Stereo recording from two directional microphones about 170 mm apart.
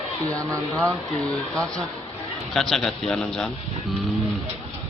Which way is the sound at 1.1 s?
5° left (ahead or behind).